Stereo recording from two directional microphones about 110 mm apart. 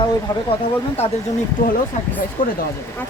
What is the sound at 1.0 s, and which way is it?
Speech, 65° left (ahead or behind).